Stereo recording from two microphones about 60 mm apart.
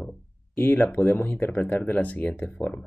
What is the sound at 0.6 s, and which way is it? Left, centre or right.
Speech, left.